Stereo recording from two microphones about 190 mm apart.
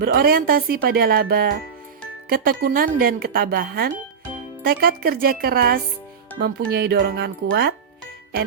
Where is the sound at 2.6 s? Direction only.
50° right (ahead or behind).